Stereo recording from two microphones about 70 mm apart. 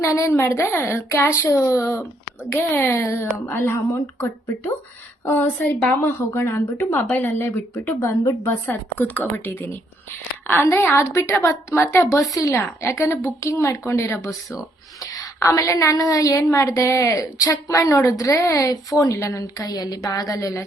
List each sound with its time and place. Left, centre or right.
0.0 s a woman's voice: left
5.4 s a woman's voice: left
7.9 s a woman's voice: left
8.4 s a woman's voice: left
12.8 s a woman's voice: left
15.0 s a woman's voice: left